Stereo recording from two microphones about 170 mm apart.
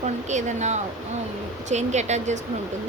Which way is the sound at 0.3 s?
45° right (ahead or behind).